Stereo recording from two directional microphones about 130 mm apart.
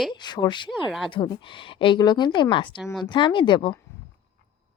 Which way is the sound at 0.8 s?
Centre (ahead or behind).